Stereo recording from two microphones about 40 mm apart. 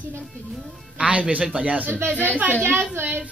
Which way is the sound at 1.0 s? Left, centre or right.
Right.